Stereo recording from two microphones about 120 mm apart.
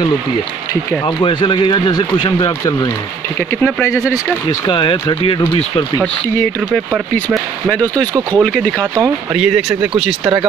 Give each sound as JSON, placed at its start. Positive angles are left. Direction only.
{"t": 1.0, "sound": "speech", "side_deg": 45}
{"t": 3.6, "sound": "speech", "side_deg": 25}
{"t": 4.6, "sound": "speech", "side_deg": 45}
{"t": 8.4, "sound": "speech", "side_deg": 5}